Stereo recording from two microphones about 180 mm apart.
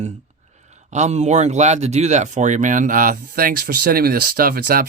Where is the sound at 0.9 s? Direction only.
40° right (ahead or behind).